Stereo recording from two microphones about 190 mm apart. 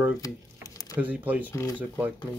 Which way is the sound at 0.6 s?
20° left (ahead or behind).